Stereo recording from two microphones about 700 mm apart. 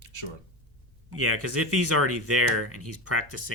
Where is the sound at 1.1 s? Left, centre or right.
Centre.